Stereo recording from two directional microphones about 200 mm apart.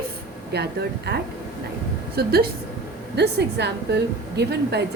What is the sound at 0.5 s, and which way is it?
A woman's voice, 55° right (ahead or behind).